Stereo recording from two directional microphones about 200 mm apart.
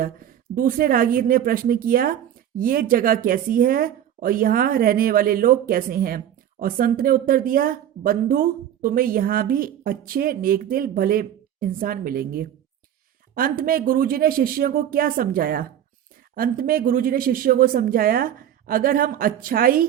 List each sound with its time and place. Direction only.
0.0 s a woman's voice: 45° right (ahead or behind)